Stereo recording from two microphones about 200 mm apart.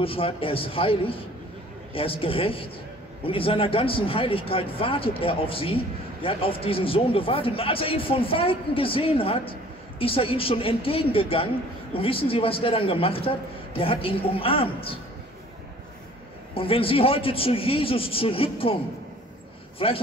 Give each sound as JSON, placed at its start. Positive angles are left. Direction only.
{"t": 0.0, "sound": "a man's voice", "side_deg": 25}
{"t": 16.5, "sound": "a man's voice", "side_deg": 30}
{"t": 19.8, "sound": "a man's voice", "side_deg": 25}